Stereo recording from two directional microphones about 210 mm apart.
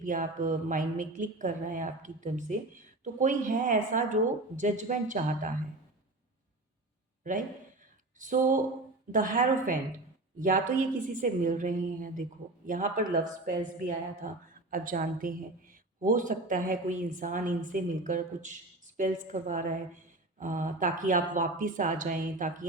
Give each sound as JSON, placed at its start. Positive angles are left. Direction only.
{"t": 0.0, "sound": "speech", "side_deg": -40}
{"t": 8.2, "sound": "speech", "side_deg": -40}
{"t": 11.1, "sound": "speech", "side_deg": -40}